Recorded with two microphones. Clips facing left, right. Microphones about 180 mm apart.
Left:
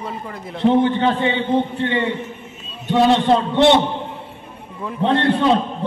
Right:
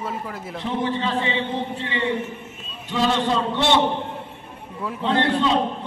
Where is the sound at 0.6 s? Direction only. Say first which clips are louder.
Left 10 dB; 60° left (ahead or behind).